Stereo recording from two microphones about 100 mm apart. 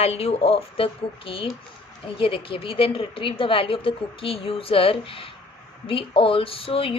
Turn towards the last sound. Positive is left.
turn(degrees=65)  # may be behind; listen again after turning